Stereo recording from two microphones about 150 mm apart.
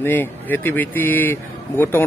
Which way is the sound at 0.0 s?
15° left (ahead or behind).